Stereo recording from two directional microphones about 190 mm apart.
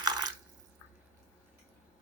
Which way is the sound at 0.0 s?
20° right (ahead or behind).